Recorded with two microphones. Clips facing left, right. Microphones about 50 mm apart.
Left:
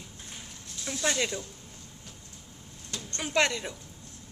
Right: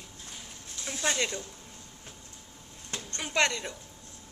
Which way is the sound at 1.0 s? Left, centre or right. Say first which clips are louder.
Left 1 dB; centre.